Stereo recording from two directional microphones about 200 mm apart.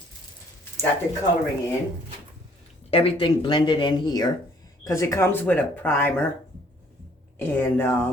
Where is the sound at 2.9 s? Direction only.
30° left (ahead or behind); by 6.2 s 10° left (ahead or behind).